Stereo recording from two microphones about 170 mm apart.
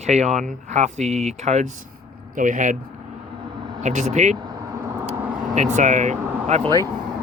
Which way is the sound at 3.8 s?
45° right (ahead or behind).